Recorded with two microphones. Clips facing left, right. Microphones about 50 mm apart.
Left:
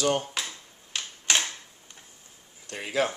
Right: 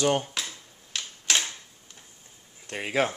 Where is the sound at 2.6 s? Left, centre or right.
Right.